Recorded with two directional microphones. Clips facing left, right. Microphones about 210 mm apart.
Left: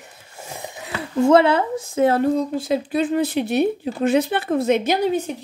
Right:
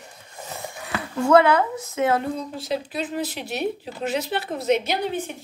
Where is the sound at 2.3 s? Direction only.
50° left (ahead or behind).